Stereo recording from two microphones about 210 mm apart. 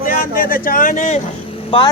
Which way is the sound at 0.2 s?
40° left (ahead or behind).